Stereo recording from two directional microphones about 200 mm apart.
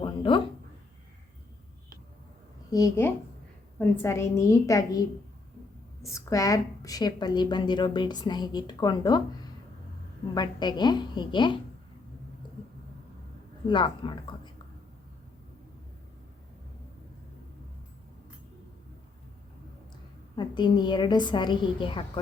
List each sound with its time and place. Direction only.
0.0 s a sound: 25° left (ahead or behind)
2.6 s a woman's voice: 15° left (ahead or behind)
6.1 s a woman's voice: 15° left (ahead or behind)
13.7 s a woman's voice: 25° left (ahead or behind)
20.3 s a woman's voice: 20° left (ahead or behind)